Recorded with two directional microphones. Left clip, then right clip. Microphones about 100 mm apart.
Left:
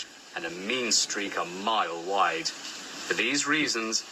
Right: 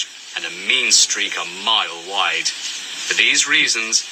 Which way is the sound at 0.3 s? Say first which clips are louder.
Right 12 dB; 70° left (ahead or behind).